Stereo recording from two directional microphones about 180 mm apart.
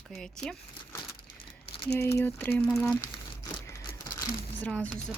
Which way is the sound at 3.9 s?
30° left (ahead or behind).